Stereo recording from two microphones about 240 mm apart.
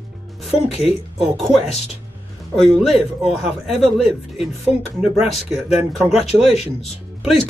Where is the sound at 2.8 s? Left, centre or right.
Centre.